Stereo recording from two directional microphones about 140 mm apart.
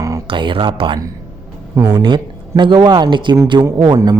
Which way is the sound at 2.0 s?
35° right (ahead or behind).